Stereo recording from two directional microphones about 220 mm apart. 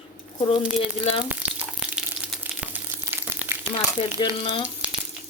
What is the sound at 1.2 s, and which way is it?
Frying, 5° right (ahead or behind).